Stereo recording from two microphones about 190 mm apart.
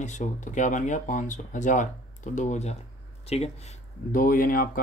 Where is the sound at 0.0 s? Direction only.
40° left (ahead or behind).